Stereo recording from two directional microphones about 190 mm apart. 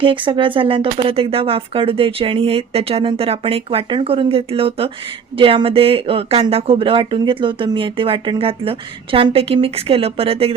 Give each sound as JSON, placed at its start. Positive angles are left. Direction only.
{"t": 0.0, "sound": "a woman's voice", "side_deg": -25}